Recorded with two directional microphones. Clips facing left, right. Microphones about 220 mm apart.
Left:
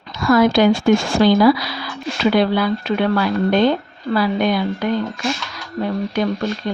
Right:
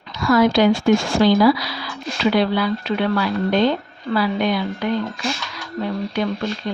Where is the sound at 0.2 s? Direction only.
50° left (ahead or behind).